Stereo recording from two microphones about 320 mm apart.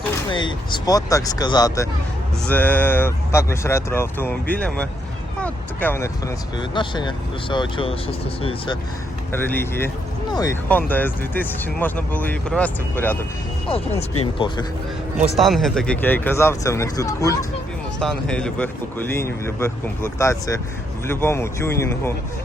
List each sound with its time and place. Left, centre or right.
0.3 s speech: centre
13.7 s speech: centre
15.4 s speech: centre